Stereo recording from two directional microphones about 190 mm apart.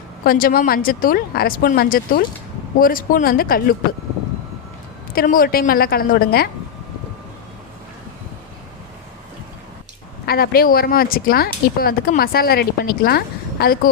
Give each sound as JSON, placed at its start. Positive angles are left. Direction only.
{"t": 0.3, "sound": "speech", "side_deg": 50}
{"t": 5.1, "sound": "speech", "side_deg": 50}
{"t": 10.2, "sound": "speech", "side_deg": 55}